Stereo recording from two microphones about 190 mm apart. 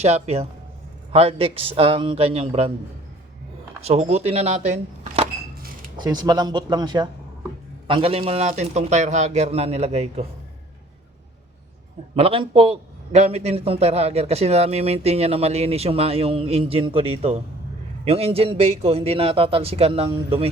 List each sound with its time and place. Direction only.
0.0 s a man's voice: 35° right (ahead or behind)
3.8 s a man's voice: 35° right (ahead or behind)
6.0 s a man's voice: 20° right (ahead or behind)
12.1 s a man's voice: 30° right (ahead or behind)